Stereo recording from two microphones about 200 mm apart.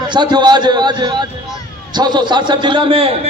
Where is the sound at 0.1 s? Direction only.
20° right (ahead or behind).